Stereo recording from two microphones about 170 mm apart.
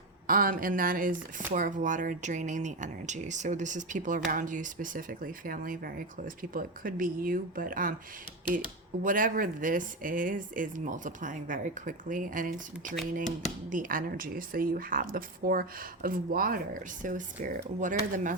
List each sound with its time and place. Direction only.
0.3 s speech: 55° right (ahead or behind)
9.0 s speech: 55° right (ahead or behind)